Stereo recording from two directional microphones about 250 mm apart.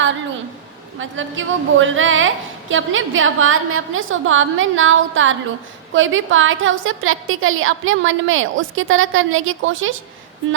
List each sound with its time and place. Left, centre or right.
0.9 s a woman's voice: right